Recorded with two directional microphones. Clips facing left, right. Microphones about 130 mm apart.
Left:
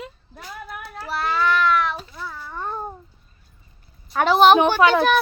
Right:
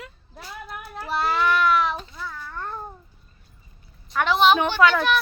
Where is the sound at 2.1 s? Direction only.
10° left (ahead or behind).